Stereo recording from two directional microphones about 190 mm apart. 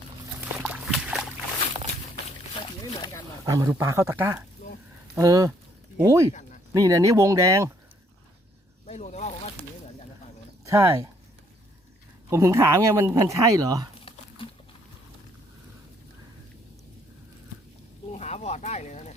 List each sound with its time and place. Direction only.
0.5 s a sound: 5° right (ahead or behind)
3.4 s speech: 15° right (ahead or behind)
8.9 s speech: 35° left (ahead or behind)
10.7 s speech: 15° right (ahead or behind)
12.3 s speech: 15° right (ahead or behind)
14.0 s crumpling: 30° left (ahead or behind)
18.1 s a sound: 35° left (ahead or behind)